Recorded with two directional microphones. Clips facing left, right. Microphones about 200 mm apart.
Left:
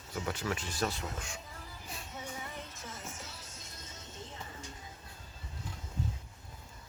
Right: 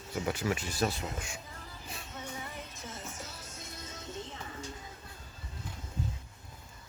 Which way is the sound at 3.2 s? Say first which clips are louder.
Right 3 dB; 45° right (ahead or behind).